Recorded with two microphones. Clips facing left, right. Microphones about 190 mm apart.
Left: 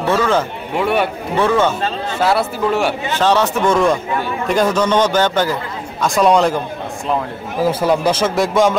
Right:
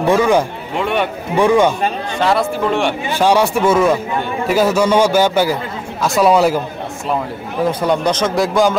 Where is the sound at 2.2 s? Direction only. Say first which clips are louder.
Right 1 dB; 5° left (ahead or behind).